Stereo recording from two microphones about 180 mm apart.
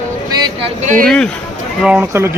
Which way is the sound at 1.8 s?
5° right (ahead or behind).